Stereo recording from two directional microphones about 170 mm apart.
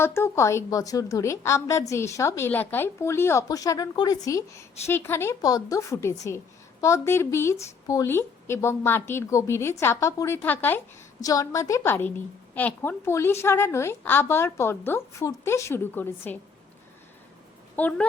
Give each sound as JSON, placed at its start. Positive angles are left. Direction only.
{"t": 0.0, "sound": "a woman's voice", "side_deg": 15}
{"t": 17.7, "sound": "a woman's voice", "side_deg": 10}